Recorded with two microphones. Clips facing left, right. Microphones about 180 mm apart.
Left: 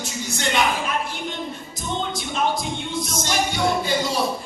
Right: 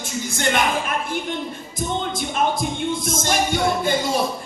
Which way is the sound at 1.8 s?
50° right (ahead or behind).